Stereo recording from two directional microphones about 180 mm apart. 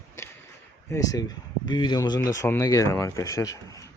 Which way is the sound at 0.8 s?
15° left (ahead or behind).